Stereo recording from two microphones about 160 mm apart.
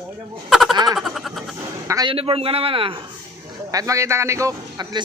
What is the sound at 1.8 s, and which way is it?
Speech, 20° right (ahead or behind).